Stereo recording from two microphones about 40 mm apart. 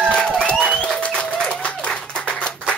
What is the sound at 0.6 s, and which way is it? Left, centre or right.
Music, centre.